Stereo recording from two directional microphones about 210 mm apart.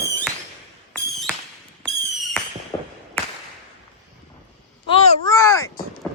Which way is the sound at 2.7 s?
20° left (ahead or behind).